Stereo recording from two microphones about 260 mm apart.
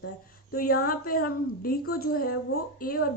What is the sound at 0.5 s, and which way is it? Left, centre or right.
A woman's voice, left.